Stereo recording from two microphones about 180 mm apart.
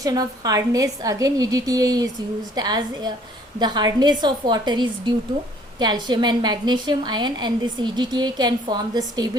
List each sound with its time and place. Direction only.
0.0 s a woman's voice: 20° right (ahead or behind)